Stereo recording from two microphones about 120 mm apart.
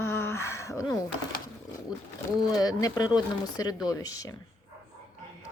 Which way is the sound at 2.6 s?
30° left (ahead or behind).